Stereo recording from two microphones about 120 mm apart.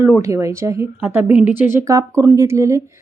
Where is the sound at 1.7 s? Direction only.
25° right (ahead or behind).